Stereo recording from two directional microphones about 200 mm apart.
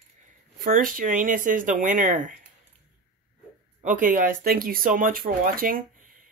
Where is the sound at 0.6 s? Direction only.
45° right (ahead or behind).